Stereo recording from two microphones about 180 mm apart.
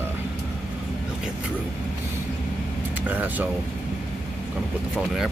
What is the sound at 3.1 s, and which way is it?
Speech, 10° right (ahead or behind).